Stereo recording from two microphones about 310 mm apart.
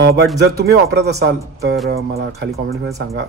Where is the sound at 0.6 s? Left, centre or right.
Right.